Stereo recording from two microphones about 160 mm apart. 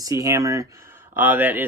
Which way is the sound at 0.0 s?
20° right (ahead or behind).